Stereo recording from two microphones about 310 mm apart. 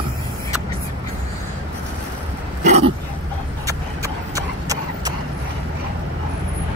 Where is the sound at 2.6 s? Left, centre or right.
Right.